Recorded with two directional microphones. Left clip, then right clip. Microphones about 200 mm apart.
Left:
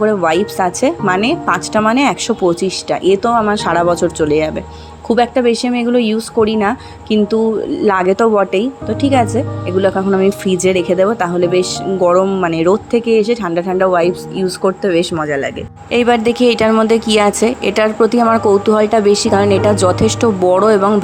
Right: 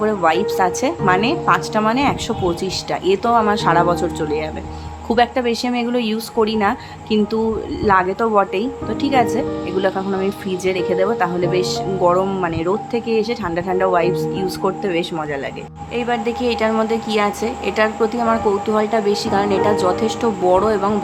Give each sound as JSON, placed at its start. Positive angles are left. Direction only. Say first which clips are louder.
{"t": 0.0, "sound": "a woman's voice", "louder": "left 3 dB", "side_deg": 25}
{"t": 15.9, "sound": "a woman's voice", "louder": "left 8 dB", "side_deg": 45}